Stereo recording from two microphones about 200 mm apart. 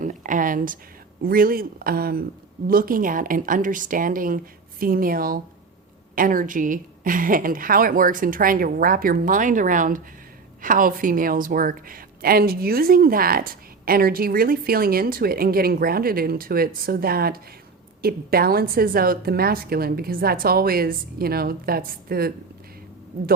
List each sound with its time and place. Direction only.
0.0 s a woman's voice: 40° right (ahead or behind)